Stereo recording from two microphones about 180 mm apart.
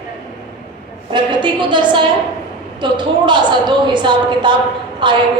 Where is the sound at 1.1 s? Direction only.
25° right (ahead or behind).